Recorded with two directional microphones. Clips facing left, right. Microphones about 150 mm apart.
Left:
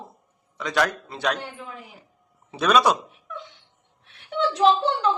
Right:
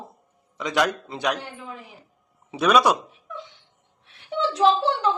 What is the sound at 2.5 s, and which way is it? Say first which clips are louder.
Speech: right 1 dB; 10° right (ahead or behind).